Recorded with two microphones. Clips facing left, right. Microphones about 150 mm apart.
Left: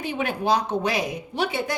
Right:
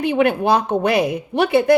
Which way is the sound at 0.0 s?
60° right (ahead or behind).